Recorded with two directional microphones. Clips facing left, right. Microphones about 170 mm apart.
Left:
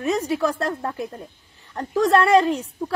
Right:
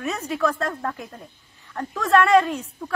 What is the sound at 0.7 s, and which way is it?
A woman's voice, 20° left (ahead or behind).